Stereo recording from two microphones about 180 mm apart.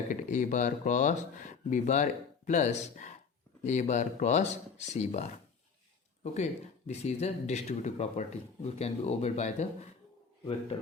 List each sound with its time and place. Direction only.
0.1 s speech: 45° left (ahead or behind)